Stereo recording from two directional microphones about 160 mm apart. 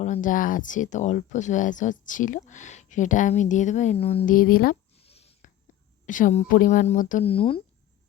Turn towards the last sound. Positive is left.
turn(degrees=35)  # may be behind; listen again after turning